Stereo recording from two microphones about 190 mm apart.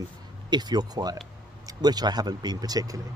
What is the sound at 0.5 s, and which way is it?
Speech, 20° right (ahead or behind).